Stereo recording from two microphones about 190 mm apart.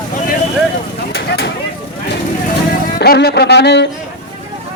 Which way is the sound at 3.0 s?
60° left (ahead or behind).